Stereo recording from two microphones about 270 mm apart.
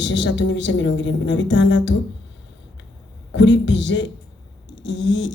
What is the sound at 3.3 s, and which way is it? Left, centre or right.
A man's voice, left.